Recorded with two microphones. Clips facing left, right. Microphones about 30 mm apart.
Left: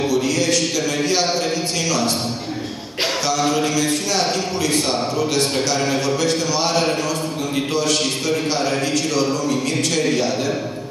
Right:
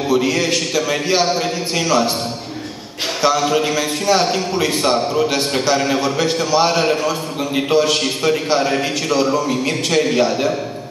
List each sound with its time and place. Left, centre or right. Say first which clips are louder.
0.1 s a man's voice: right 6 dB; right
3.3 s a man's voice: right 6 dB; centre